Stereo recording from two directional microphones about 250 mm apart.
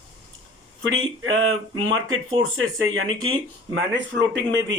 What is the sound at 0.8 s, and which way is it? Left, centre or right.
Speech, right.